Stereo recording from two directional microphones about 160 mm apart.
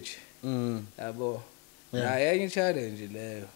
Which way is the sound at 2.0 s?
10° left (ahead or behind).